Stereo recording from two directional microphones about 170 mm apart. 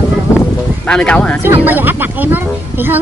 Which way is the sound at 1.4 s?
10° right (ahead or behind).